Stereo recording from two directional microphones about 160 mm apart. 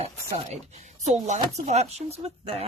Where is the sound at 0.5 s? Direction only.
45° right (ahead or behind).